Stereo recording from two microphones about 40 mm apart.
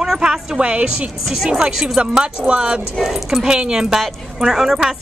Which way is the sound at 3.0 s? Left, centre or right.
Centre.